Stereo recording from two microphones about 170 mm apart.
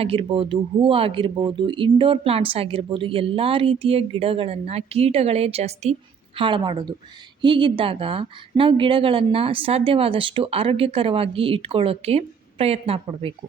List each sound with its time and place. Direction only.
0.0 s speech: 35° right (ahead or behind)